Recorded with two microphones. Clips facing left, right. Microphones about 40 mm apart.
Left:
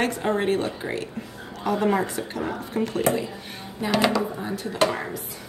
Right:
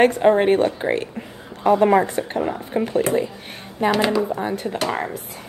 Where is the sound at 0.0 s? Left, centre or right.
Right.